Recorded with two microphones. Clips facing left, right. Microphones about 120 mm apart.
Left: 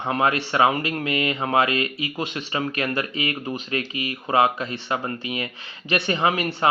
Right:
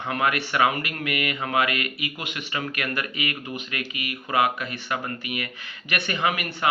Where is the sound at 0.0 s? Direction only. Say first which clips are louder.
Left 3 dB; 30° left (ahead or behind).